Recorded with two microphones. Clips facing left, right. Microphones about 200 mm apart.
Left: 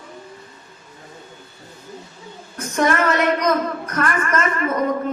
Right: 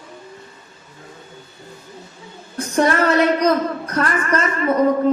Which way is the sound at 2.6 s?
35° right (ahead or behind).